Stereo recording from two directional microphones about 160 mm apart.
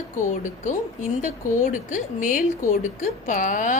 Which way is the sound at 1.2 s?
50° left (ahead or behind).